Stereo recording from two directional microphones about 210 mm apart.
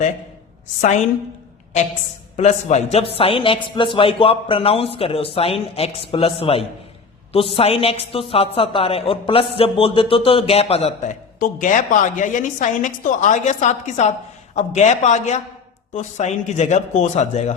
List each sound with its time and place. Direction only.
0.8 s a man's voice: 35° left (ahead or behind)
2.3 s a man's voice: 35° left (ahead or behind)